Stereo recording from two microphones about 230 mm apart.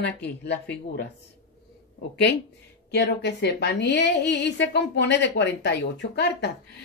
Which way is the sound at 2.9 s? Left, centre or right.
Left.